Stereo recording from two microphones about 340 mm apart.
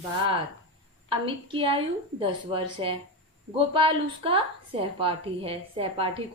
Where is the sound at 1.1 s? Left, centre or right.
Centre.